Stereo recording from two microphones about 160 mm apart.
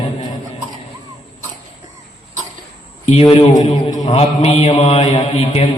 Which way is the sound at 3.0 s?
35° left (ahead or behind).